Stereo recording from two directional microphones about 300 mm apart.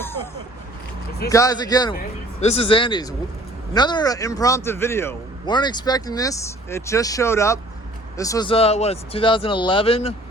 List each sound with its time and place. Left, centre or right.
1.3 s speech: centre